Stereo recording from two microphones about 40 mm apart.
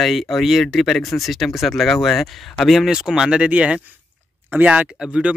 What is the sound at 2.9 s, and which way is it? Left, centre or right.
Speech, centre.